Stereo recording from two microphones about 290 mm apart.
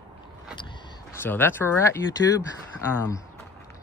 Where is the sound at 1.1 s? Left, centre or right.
Centre.